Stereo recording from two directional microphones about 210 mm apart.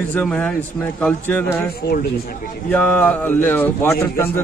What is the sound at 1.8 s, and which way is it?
Speech, 50° left (ahead or behind).